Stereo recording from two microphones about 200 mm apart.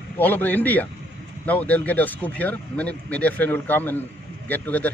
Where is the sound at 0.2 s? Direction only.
10° left (ahead or behind).